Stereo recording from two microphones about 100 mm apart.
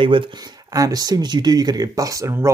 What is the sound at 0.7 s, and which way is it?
Speech, 40° right (ahead or behind).